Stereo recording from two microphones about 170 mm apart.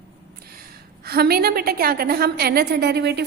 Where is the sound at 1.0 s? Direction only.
65° right (ahead or behind).